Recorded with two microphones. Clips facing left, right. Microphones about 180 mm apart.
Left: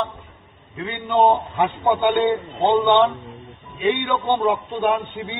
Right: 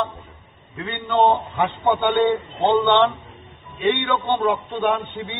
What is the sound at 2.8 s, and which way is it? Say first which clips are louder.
Speech: left 2 dB; 15° left (ahead or behind).